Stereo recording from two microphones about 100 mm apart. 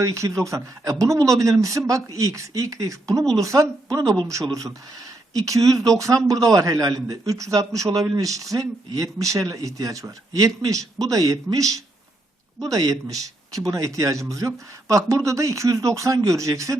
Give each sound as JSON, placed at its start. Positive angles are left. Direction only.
{"t": 0.0, "sound": "a man's voice", "side_deg": -30}
{"t": 5.3, "sound": "a man's voice", "side_deg": -35}